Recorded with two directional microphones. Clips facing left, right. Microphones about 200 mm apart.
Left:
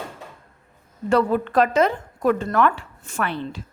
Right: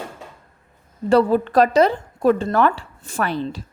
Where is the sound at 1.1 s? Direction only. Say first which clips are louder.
Right 4 dB; 35° right (ahead or behind).